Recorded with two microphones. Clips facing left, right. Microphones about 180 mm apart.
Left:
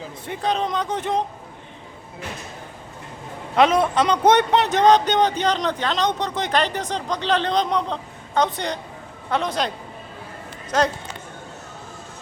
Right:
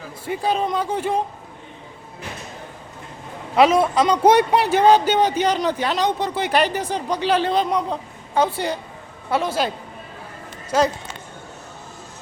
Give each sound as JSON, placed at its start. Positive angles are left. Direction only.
{"t": 0.3, "sound": "speech", "side_deg": -5}
{"t": 3.5, "sound": "a man's voice", "side_deg": -5}